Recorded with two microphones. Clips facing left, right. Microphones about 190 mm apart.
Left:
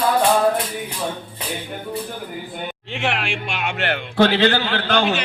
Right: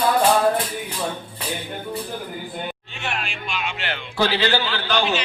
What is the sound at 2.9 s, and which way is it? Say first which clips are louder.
A man's voice: left 9 dB; 85° left.